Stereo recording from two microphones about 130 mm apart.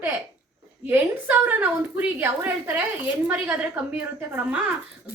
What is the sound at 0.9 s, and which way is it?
A woman's voice, 15° right (ahead or behind).